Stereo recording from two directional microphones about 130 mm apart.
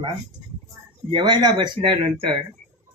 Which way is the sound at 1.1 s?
35° right (ahead or behind).